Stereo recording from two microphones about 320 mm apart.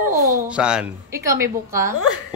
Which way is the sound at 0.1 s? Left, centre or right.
Right.